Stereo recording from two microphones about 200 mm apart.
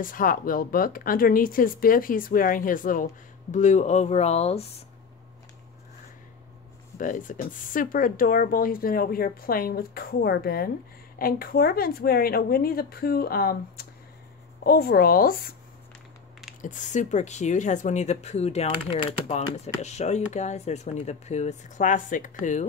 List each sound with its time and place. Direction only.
0.0 s speech: 45° left (ahead or behind)
7.0 s speech: 40° left (ahead or behind)
16.6 s speech: 40° left (ahead or behind)